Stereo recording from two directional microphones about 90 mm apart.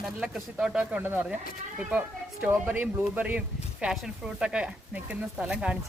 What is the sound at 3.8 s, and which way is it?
Speech, 5° right (ahead or behind).